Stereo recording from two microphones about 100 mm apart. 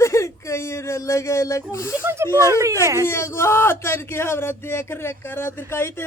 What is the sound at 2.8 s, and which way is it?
Speech, 30° right (ahead or behind).